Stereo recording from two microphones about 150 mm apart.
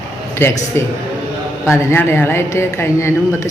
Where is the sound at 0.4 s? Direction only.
15° left (ahead or behind).